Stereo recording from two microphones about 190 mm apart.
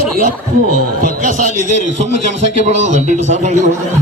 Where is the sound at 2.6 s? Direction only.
40° right (ahead or behind).